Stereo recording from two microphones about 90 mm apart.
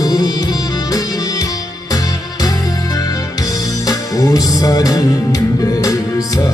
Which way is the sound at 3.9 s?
45° left (ahead or behind).